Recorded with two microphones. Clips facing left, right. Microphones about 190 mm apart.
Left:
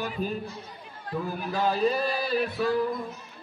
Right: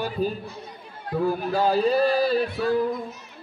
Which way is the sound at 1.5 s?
35° right (ahead or behind).